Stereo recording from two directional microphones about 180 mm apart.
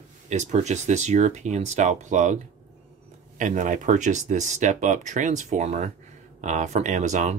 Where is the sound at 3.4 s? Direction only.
45° right (ahead or behind).